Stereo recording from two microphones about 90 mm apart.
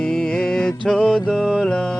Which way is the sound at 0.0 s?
10° left (ahead or behind).